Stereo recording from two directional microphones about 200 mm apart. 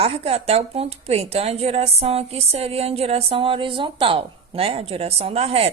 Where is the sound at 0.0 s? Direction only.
30° right (ahead or behind).